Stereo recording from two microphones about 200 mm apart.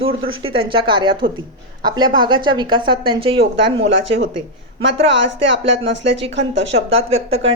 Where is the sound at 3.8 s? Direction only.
65° right (ahead or behind).